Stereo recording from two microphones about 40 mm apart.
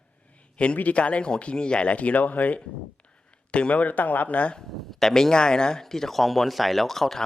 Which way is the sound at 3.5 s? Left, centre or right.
Left.